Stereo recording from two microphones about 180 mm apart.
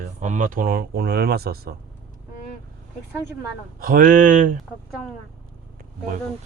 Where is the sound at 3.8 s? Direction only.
50° right (ahead or behind).